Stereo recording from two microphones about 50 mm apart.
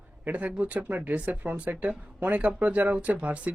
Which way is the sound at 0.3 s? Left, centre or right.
Right.